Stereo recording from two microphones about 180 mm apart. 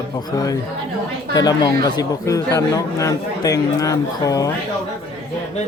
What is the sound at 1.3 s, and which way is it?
Speech, 20° left (ahead or behind).